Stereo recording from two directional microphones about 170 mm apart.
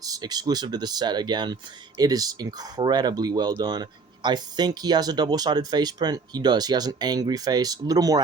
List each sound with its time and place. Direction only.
0.0 s speech: 20° right (ahead or behind)